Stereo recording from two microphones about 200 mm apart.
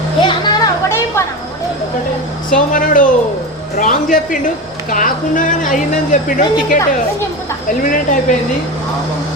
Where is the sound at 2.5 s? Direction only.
45° left (ahead or behind).